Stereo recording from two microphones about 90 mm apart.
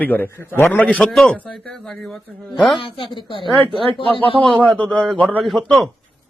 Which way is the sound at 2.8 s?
70° left (ahead or behind).